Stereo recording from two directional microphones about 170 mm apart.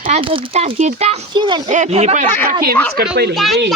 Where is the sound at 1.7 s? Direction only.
45° right (ahead or behind).